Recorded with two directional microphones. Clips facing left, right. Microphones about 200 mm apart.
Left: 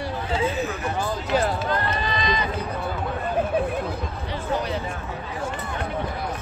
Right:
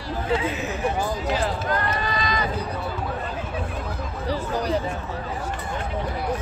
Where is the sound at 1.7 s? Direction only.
25° left (ahead or behind).